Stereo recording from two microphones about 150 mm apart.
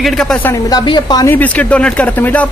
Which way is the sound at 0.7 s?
25° left (ahead or behind).